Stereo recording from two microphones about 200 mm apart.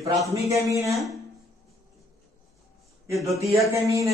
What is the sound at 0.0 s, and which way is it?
Speech, 15° right (ahead or behind).